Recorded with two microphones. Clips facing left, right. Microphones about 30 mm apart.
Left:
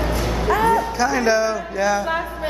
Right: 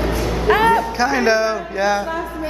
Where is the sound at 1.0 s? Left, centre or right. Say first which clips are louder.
Right 2 dB; right.